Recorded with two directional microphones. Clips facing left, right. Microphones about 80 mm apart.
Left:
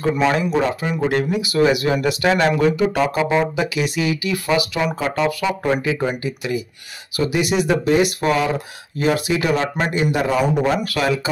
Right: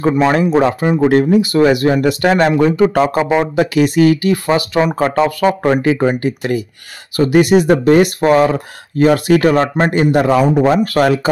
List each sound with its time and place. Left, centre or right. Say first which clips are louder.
0.0 s speech: right 5 dB; right
4.5 s speech: right 3 dB; right
5.6 s speech: right 7 dB; right
10.6 s speech: right 7 dB; right